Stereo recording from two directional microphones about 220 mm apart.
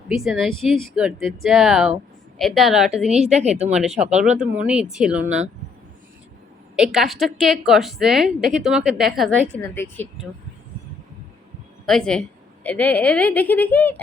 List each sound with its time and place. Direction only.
0.1 s a woman's voice: centre (ahead or behind)
3.3 s speech: 30° right (ahead or behind)
3.7 s a woman's voice: 5° right (ahead or behind)
6.7 s a woman's voice: centre (ahead or behind)
9.6 s speech: 10° left (ahead or behind)
11.9 s a woman's voice: centre (ahead or behind)